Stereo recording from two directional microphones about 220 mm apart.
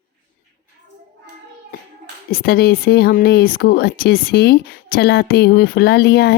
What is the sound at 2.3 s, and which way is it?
Speech, 45° left (ahead or behind).